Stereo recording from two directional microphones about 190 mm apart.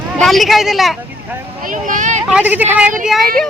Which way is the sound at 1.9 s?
40° right (ahead or behind).